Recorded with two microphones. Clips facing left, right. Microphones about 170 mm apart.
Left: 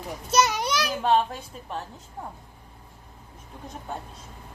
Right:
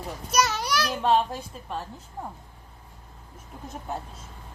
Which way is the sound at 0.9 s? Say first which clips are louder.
Even; centre (ahead or behind).